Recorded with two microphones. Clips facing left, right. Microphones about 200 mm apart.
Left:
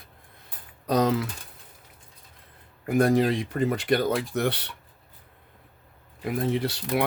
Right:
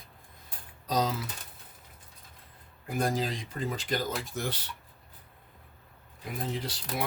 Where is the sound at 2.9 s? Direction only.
65° left (ahead or behind).